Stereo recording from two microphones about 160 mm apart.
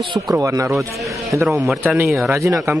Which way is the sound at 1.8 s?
10° right (ahead or behind).